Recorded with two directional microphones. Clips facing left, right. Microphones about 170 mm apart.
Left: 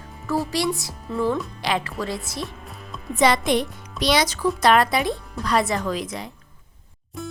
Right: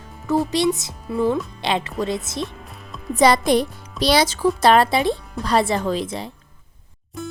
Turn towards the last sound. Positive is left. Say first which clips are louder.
# right 2 dB
turn(degrees=0)  # may be behind; listen again after turning